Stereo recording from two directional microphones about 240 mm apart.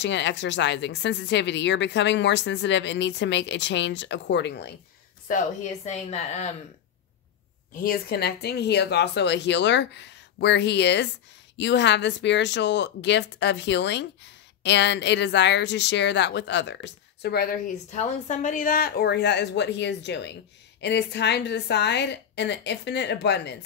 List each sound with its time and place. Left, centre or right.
0.0 s speech: left
5.3 s speech: left
7.7 s speech: left
17.9 s speech: left